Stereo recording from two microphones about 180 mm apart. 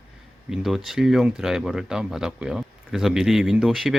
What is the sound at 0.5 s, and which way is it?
Speech, centre (ahead or behind).